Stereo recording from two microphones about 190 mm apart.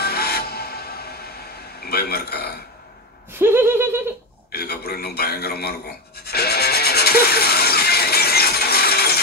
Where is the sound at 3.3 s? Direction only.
10° right (ahead or behind).